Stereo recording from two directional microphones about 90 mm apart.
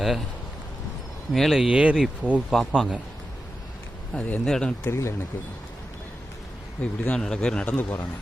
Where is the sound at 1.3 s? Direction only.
Centre (ahead or behind).